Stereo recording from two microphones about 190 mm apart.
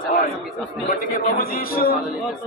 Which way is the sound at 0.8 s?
50° left (ahead or behind).